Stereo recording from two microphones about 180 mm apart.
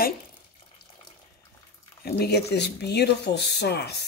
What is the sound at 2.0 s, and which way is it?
Speech, 65° left (ahead or behind).